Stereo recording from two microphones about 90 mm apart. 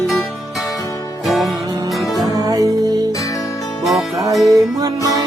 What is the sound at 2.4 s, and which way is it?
Music, 45° right (ahead or behind).